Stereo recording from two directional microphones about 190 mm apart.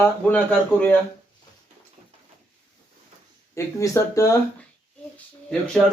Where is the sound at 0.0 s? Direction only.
10° left (ahead or behind).